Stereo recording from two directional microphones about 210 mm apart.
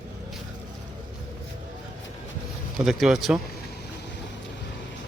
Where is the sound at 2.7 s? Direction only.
Centre (ahead or behind).